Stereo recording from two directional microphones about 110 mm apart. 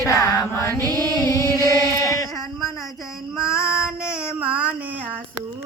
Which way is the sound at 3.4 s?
5° right (ahead or behind).